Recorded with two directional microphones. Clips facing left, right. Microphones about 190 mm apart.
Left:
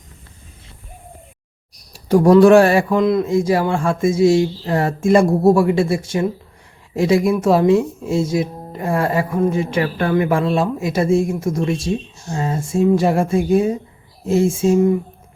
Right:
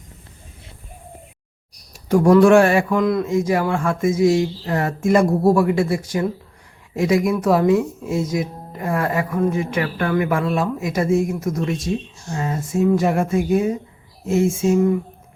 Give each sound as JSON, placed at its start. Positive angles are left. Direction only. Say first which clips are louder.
{"t": 1.9, "sound": "speech", "louder": "left 2 dB", "side_deg": 35}